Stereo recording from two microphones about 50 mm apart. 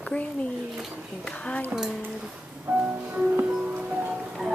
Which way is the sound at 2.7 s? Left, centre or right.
Right.